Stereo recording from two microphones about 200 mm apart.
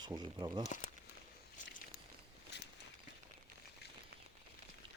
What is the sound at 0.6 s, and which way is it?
Speech, 40° left (ahead or behind).